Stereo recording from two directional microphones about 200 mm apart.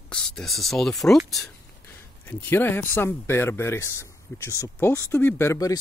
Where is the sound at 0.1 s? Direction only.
5° left (ahead or behind).